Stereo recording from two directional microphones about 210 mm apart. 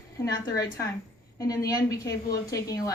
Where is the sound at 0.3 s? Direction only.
15° left (ahead or behind).